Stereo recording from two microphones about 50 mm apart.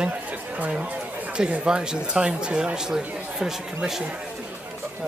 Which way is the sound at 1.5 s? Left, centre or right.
Centre.